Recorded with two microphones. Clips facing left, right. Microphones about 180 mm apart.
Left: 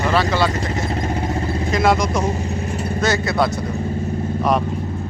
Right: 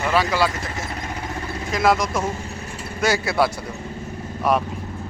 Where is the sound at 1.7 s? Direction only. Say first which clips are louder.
Left 1 dB; centre (ahead or behind).